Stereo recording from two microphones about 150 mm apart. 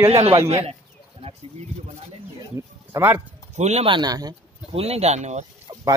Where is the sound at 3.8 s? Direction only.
30° right (ahead or behind).